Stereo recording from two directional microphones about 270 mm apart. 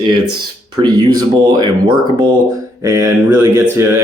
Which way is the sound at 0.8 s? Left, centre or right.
Centre.